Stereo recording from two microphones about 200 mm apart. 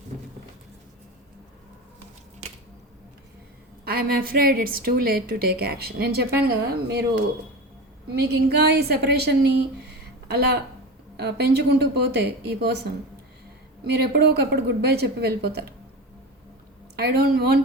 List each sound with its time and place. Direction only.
3.8 s a woman's voice: 50° right (ahead or behind)
8.1 s a woman's voice: 55° right (ahead or behind)
9.8 s a sound: 55° right (ahead or behind)
11.2 s a woman's voice: 55° right (ahead or behind)
17.0 s a woman's voice: 50° right (ahead or behind)